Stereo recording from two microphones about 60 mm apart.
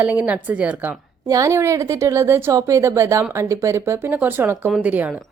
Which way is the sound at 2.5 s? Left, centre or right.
Right.